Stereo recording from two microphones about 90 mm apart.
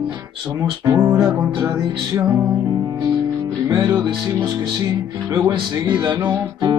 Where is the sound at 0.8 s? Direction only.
40° right (ahead or behind).